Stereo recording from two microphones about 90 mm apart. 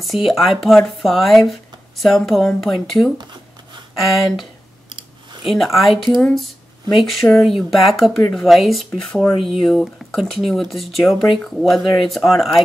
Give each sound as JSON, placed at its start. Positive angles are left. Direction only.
{"t": 0.0, "sound": "speech", "side_deg": 0}
{"t": 4.8, "sound": "clicking", "side_deg": -60}
{"t": 5.4, "sound": "speech", "side_deg": 0}